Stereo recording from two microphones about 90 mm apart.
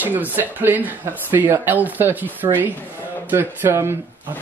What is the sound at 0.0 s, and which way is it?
Speech, 20° right (ahead or behind).